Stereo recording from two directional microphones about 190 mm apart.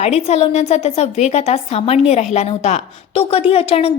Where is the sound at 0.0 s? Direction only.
35° left (ahead or behind).